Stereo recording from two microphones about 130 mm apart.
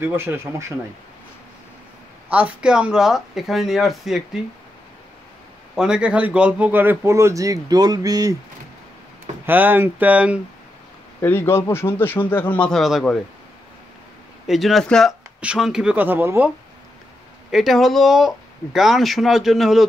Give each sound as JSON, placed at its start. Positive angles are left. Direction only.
{"t": 0.0, "sound": "speech", "side_deg": -15}
{"t": 2.2, "sound": "speech", "side_deg": -10}
{"t": 5.8, "sound": "speech", "side_deg": -5}
{"t": 9.5, "sound": "speech", "side_deg": -15}
{"t": 11.1, "sound": "a man's voice", "side_deg": 15}
{"t": 14.5, "sound": "speech", "side_deg": 0}
{"t": 17.5, "sound": "speech", "side_deg": 0}